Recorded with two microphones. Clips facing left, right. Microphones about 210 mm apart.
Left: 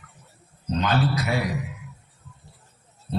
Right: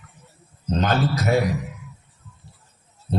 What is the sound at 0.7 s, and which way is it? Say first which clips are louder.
Speech: right 2 dB; 45° right (ahead or behind).